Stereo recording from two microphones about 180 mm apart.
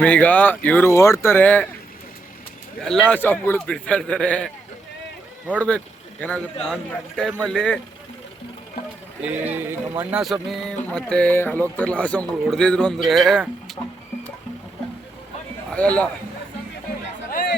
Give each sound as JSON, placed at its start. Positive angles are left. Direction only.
{"t": 0.0, "sound": "a man's voice", "side_deg": 10}
{"t": 2.8, "sound": "a man's voice", "side_deg": 5}
{"t": 5.5, "sound": "a man's voice", "side_deg": 5}
{"t": 9.2, "sound": "speech", "side_deg": -10}
{"t": 15.7, "sound": "a man's voice", "side_deg": 5}
{"t": 17.3, "sound": "chatter", "side_deg": 60}